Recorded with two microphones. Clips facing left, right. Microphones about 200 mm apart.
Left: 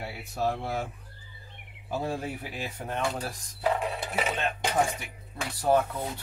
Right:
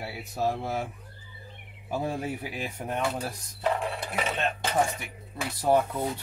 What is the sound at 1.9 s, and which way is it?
Speech, 10° right (ahead or behind).